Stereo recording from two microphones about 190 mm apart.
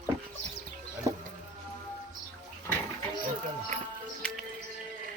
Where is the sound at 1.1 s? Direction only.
15° right (ahead or behind).